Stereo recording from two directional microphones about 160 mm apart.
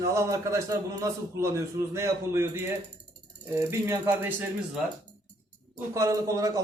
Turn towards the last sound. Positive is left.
turn(degrees=-20)  # may be behind; listen again after turning